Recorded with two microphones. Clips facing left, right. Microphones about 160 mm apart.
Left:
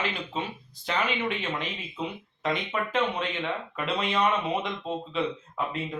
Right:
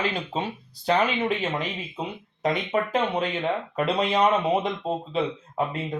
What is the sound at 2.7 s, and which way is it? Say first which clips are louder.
Speech: right 4 dB; 40° right (ahead or behind).